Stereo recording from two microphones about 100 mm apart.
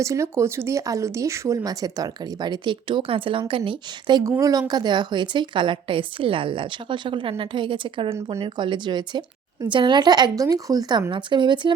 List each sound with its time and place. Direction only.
0.0 s speech: 30° right (ahead or behind); by 4.2 s 55° right (ahead or behind)
4.3 s speech: 35° right (ahead or behind)
4.7 s a woman's voice: 45° right (ahead or behind)
8.3 s speech: 70° right (ahead or behind)
8.5 s a woman's voice: 50° right (ahead or behind)